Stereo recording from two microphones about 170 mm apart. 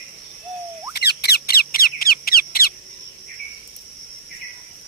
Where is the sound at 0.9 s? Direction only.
70° left (ahead or behind).